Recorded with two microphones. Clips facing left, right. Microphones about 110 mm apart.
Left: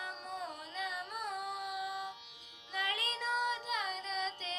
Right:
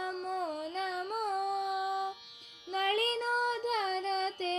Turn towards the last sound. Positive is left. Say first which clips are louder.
# right 7 dB
turn(degrees=-60)  # may be behind; listen again after turning